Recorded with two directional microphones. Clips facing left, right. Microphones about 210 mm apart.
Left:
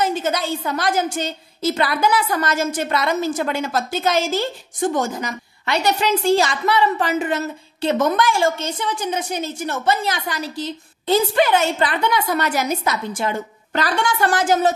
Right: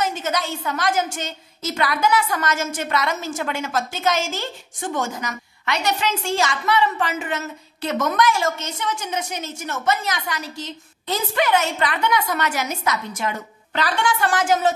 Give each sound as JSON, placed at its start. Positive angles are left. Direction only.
{"t": 0.0, "sound": "a woman's voice", "side_deg": 30}